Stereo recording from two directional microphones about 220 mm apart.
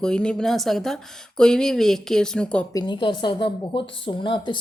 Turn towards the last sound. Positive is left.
turn(degrees=20)  # may be behind; listen again after turning